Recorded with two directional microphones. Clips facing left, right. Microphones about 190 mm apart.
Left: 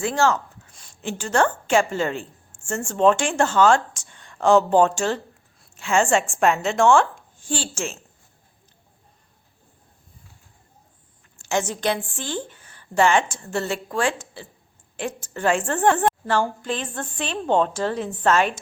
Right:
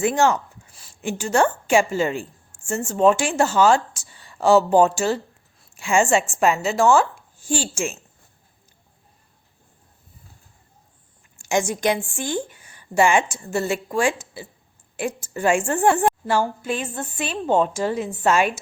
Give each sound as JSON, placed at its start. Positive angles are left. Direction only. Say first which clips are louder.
{"t": 0.0, "sound": "a woman's voice", "louder": "right 2 dB", "side_deg": -15}
{"t": 0.7, "sound": "a woman's voice", "louder": "right 3 dB", "side_deg": -5}
{"t": 11.3, "sound": "a woman's voice", "louder": "right 2 dB", "side_deg": -10}